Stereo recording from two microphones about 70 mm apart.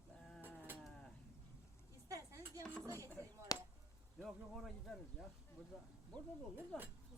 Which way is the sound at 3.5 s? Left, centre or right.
Left.